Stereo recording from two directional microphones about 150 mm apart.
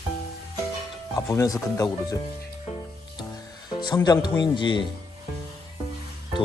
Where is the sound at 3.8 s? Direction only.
25° left (ahead or behind).